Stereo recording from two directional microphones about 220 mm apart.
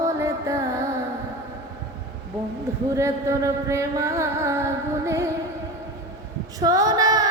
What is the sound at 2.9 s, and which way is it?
Music, 15° right (ahead or behind).